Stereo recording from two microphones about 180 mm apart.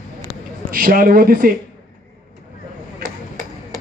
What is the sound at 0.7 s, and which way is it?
Speech, 50° right (ahead or behind).